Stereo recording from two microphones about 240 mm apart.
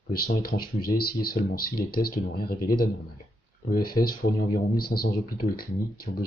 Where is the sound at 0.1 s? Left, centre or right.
Left.